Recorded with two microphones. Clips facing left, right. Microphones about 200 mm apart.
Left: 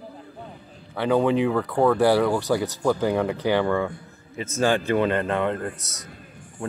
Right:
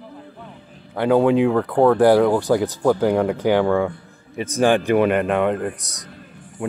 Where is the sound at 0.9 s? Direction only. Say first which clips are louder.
Right 5 dB; 15° right (ahead or behind).